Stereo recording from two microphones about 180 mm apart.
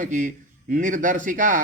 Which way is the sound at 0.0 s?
45° right (ahead or behind).